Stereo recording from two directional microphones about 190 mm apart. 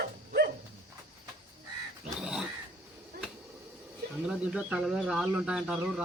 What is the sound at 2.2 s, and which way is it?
Speech, 5° right (ahead or behind).